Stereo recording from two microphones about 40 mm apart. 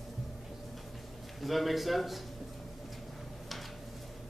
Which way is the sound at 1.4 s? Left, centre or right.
Centre.